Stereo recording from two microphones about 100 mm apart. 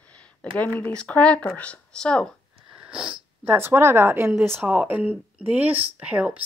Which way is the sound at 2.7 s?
10° right (ahead or behind).